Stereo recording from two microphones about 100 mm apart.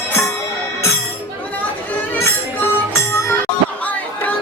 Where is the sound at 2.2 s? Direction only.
30° left (ahead or behind).